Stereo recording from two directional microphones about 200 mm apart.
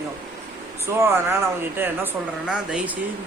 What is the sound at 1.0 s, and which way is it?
Speech, 10° right (ahead or behind).